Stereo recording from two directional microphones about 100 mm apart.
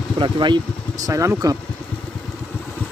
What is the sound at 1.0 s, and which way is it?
Speech, 30° right (ahead or behind).